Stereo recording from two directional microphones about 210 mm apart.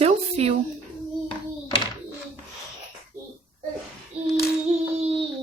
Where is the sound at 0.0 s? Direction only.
30° right (ahead or behind).